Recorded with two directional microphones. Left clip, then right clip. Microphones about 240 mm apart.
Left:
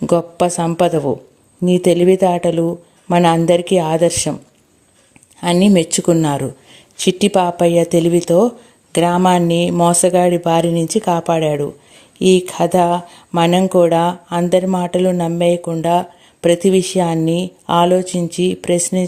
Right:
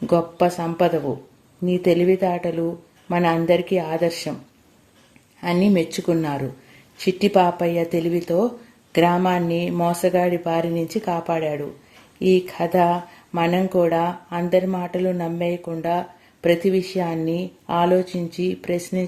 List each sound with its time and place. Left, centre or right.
0.1 s speech: left
5.6 s speech: left